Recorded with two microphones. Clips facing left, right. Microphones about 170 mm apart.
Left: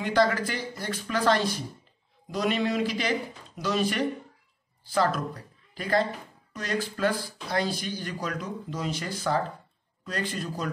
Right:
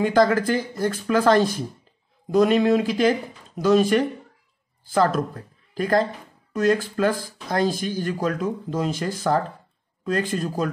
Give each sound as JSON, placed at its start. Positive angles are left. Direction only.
{"t": 0.0, "sound": "speech", "side_deg": -45}